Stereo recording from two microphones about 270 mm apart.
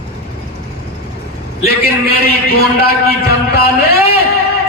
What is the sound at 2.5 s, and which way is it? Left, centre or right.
A man's voice, left.